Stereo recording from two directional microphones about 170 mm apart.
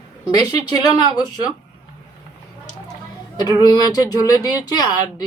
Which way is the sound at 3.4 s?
20° left (ahead or behind).